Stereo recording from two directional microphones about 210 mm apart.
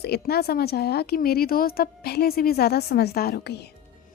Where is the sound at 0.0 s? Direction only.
50° left (ahead or behind).